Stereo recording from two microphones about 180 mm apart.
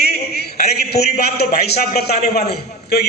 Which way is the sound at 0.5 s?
60° left (ahead or behind).